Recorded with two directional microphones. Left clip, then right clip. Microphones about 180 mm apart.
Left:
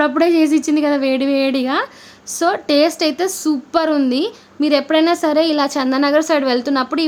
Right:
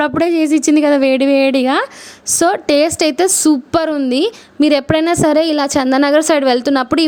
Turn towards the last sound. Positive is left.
turn(degrees=-45)  # may be behind; listen again after turning